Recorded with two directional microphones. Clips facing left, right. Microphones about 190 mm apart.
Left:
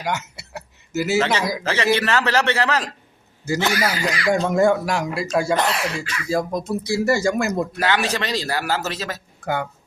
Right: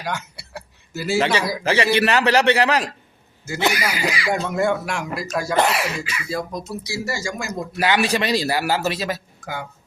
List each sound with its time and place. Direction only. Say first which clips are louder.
0.0 s speech: left 2 dB; 20° left (ahead or behind)
1.2 s a man's voice: right 1 dB; 10° right (ahead or behind)
4.3 s speech: left 5 dB; 45° left (ahead or behind); by 5.5 s 25° left (ahead or behind)
5.5 s a man's voice: right 2 dB; 10° right (ahead or behind)
6.2 s speech: left 7 dB; 50° left (ahead or behind)
7.8 s a man's voice: right 7 dB; 10° right (ahead or behind)
9.4 s speech: left 7 dB; 60° left (ahead or behind)